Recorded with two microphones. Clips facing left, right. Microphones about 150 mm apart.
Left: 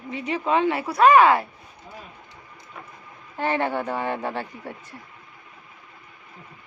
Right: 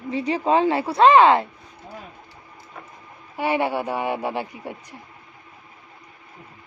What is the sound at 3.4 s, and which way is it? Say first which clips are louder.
A woman's voice: right 2 dB; 10° right (ahead or behind).